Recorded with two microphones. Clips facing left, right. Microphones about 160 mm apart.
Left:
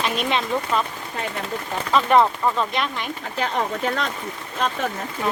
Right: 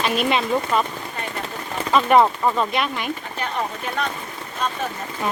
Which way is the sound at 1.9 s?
5° right (ahead or behind).